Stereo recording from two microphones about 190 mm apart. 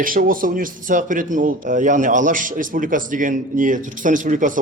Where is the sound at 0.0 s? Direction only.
45° right (ahead or behind).